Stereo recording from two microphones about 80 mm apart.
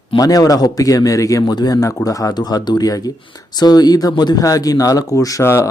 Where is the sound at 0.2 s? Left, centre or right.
Left.